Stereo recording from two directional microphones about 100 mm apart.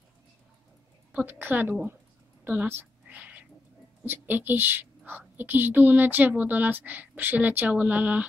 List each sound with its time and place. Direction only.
1.1 s a woman's voice: 20° right (ahead or behind)
2.4 s a sound: 20° right (ahead or behind)
4.0 s a woman's voice: 20° right (ahead or behind)